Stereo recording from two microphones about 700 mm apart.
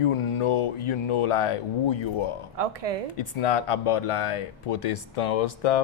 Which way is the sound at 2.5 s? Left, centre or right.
Right.